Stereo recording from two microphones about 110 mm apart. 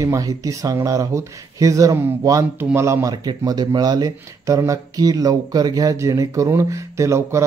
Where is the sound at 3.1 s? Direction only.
40° right (ahead or behind).